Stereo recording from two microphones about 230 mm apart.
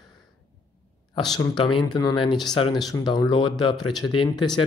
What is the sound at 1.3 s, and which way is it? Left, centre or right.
Speech, centre.